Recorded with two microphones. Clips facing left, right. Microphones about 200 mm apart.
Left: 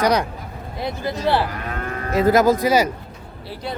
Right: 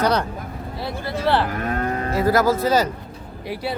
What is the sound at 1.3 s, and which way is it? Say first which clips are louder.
Cattle: right 1 dB; 15° left (ahead or behind).